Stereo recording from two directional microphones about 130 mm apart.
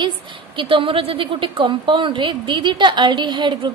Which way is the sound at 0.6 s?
40° right (ahead or behind).